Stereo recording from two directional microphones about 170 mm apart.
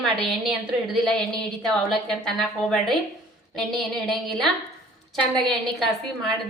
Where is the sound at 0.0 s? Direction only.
Centre (ahead or behind).